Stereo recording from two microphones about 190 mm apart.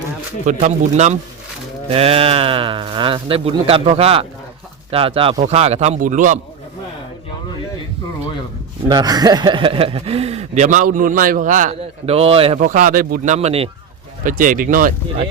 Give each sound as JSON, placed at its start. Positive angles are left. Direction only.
{"t": 0.4, "sound": "speech", "side_deg": -40}
{"t": 8.9, "sound": "speech", "side_deg": -20}
{"t": 12.5, "sound": "speech", "side_deg": -45}
{"t": 14.3, "sound": "speech", "side_deg": -45}